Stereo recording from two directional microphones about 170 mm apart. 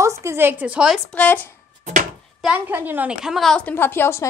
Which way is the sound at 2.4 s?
10° right (ahead or behind).